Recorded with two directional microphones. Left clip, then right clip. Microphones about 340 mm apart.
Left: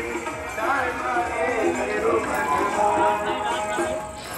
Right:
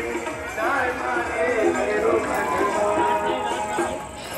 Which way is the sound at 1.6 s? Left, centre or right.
Centre.